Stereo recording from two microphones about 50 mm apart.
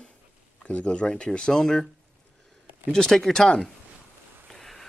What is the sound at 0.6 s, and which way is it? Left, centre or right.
Speech, left.